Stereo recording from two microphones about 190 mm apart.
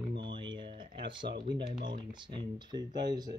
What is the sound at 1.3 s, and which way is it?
Speech, 65° right (ahead or behind).